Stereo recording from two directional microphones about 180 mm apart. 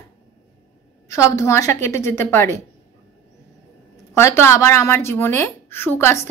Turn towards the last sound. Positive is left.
turn(degrees=15)  # may be behind; listen again after turning